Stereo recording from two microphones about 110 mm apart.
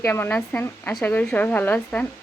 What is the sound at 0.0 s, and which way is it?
A woman's voice, 20° left (ahead or behind).